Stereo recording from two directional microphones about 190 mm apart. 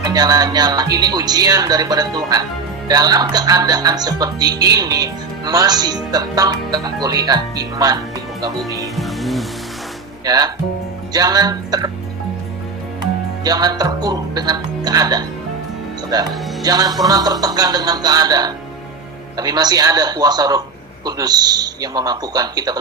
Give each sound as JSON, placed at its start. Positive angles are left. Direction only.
{"t": 0.0, "sound": "a man's voice", "side_deg": -20}
{"t": 9.0, "sound": "music", "side_deg": 0}
{"t": 10.2, "sound": "a man's voice", "side_deg": -20}
{"t": 13.4, "sound": "a man's voice", "side_deg": -20}